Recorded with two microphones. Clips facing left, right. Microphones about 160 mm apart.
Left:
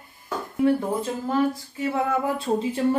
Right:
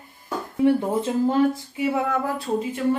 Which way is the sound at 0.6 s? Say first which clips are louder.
Right 2 dB; 25° right (ahead or behind).